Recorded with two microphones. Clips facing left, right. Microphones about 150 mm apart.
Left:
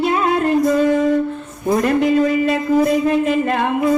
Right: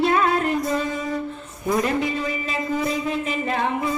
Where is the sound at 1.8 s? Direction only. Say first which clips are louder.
Left 8 dB; 50° left (ahead or behind).